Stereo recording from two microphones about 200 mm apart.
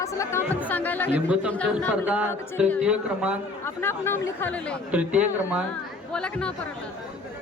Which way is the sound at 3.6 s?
10° left (ahead or behind).